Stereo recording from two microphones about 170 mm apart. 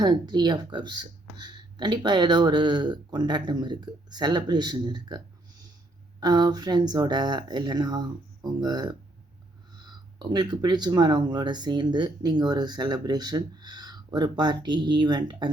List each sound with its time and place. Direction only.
0.0 s speech: 25° right (ahead or behind)